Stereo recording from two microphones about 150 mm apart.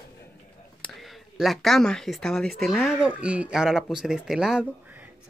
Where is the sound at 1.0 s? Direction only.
Centre (ahead or behind).